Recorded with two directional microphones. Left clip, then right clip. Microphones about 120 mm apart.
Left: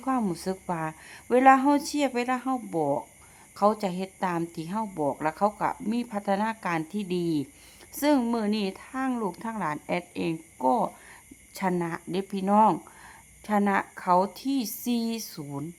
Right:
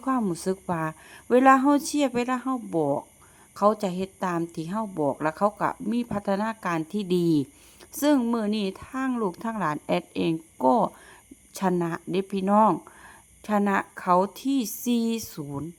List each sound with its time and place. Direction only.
0.3 s a woman's voice: 30° right (ahead or behind)
7.1 s speech: 50° right (ahead or behind)
7.9 s a woman's voice: 30° right (ahead or behind)